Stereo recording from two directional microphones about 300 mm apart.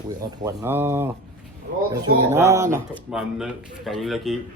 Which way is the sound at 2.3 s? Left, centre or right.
Centre.